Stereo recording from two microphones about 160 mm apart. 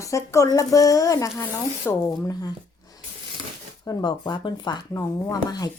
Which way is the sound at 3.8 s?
25° left (ahead or behind).